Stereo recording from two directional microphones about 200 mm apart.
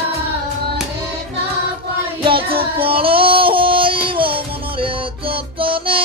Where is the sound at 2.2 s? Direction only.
25° right (ahead or behind).